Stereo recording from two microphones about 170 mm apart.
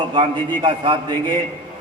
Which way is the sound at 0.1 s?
30° right (ahead or behind).